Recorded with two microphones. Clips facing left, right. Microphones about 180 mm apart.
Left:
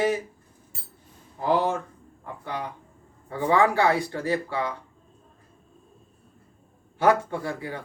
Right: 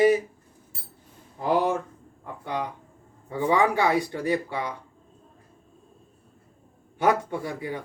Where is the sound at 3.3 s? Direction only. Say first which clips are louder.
Left 1 dB; 15° right (ahead or behind).